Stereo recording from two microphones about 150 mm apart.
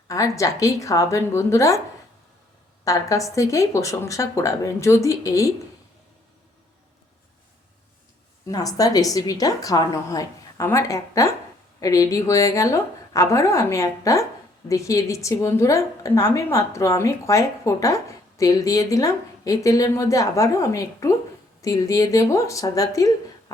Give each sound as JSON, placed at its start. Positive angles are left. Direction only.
{"t": 0.1, "sound": "a woman's voice", "side_deg": 20}
{"t": 2.8, "sound": "a woman's voice", "side_deg": 20}
{"t": 8.4, "sound": "a woman's voice", "side_deg": 25}